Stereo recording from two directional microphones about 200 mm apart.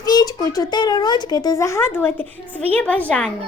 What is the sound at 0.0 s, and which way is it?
A woman's voice, 20° left (ahead or behind).